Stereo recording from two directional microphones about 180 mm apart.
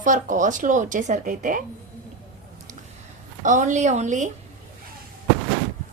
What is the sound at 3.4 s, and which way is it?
Speech, 45° right (ahead or behind).